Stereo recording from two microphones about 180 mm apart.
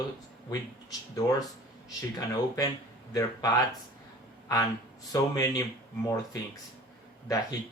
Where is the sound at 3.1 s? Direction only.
20° left (ahead or behind).